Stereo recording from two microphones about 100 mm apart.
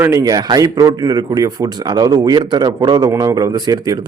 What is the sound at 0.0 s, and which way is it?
Speech, 25° right (ahead or behind).